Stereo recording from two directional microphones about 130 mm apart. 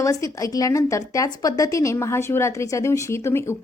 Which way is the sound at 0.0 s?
25° left (ahead or behind).